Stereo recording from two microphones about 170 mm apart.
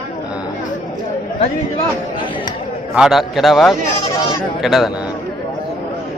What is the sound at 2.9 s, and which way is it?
A man's voice, 5° right (ahead or behind).